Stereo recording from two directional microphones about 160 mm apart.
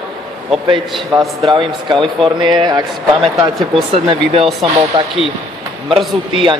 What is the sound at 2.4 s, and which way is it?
Speech, 30° right (ahead or behind).